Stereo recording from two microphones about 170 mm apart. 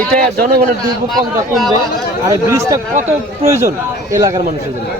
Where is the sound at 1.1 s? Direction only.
Centre (ahead or behind).